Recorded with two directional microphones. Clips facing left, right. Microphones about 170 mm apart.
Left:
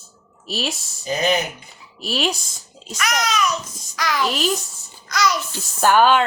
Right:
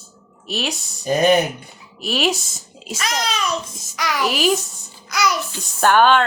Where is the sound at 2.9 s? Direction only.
30° right (ahead or behind).